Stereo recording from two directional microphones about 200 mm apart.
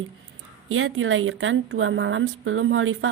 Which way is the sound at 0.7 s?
90° right.